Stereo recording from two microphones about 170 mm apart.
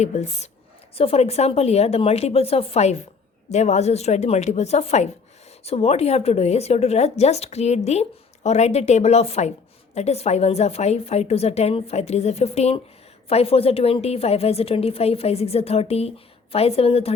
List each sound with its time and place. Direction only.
0.0 s a woman's voice: 40° left (ahead or behind)